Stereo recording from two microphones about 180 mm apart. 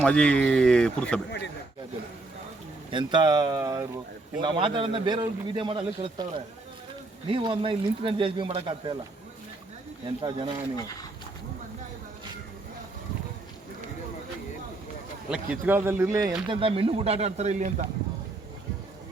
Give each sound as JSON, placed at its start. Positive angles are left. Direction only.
{"t": 0.0, "sound": "speech", "side_deg": 5}
{"t": 2.9, "sound": "a man's voice", "side_deg": -25}
{"t": 10.2, "sound": "speech", "side_deg": -30}
{"t": 15.3, "sound": "speech", "side_deg": -10}
{"t": 16.5, "sound": "speech", "side_deg": -30}